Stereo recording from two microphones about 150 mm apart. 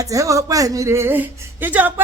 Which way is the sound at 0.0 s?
20° right (ahead or behind).